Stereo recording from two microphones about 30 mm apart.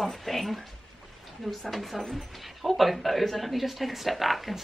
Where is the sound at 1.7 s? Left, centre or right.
Centre.